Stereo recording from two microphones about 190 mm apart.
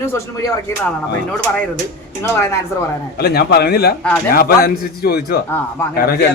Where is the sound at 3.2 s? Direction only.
55° left (ahead or behind).